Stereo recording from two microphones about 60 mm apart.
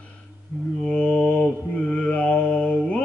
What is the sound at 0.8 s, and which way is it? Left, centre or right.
Mantra, left.